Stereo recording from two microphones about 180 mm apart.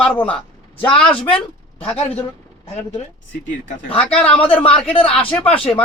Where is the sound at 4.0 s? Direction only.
5° left (ahead or behind).